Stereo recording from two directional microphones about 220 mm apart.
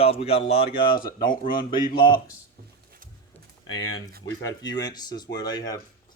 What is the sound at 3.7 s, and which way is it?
Speech, 15° left (ahead or behind).